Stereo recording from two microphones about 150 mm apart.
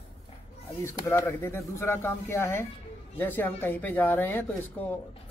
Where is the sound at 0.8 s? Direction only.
20° left (ahead or behind).